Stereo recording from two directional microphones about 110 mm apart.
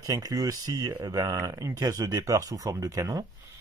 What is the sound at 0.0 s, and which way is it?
Speech, 35° right (ahead or behind).